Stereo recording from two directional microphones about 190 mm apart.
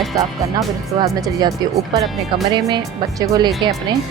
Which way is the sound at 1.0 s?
20° right (ahead or behind).